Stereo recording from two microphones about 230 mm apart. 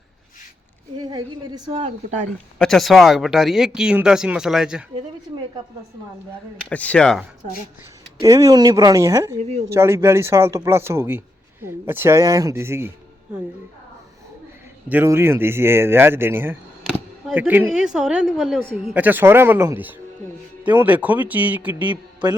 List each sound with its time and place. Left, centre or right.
0.9 s a woman's voice: centre
2.6 s speech: centre
6.7 s speech: centre
8.2 s a man's voice: centre
9.4 s a woman's voice: right
9.6 s a man's voice: centre
14.8 s a man's voice: centre